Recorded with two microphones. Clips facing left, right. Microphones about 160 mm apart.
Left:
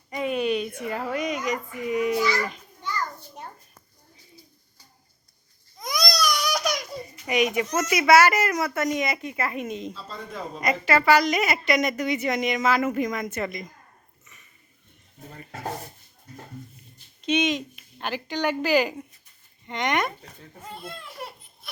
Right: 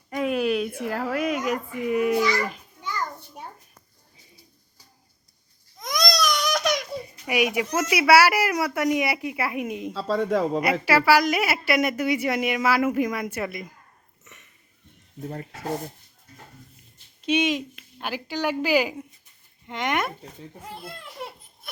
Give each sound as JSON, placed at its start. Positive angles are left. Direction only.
{"t": 0.1, "sound": "speech", "side_deg": 0}
{"t": 5.8, "sound": "speech", "side_deg": 0}
{"t": 9.9, "sound": "speech", "side_deg": -90}
{"t": 10.6, "sound": "a woman's voice", "side_deg": -10}
{"t": 17.2, "sound": "a woman's voice", "side_deg": -10}